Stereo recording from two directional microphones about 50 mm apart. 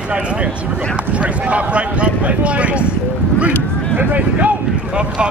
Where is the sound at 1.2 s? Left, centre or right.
Right.